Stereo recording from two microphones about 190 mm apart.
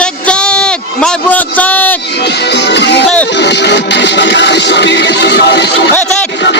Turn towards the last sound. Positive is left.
turn(degrees=70)  # may be behind; listen again after turning